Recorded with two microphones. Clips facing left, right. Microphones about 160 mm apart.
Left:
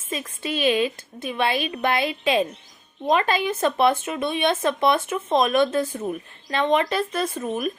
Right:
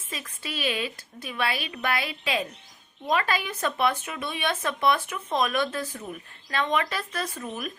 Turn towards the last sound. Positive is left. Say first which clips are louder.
# left 8 dB
turn(degrees=25)  # may be behind; listen again after turning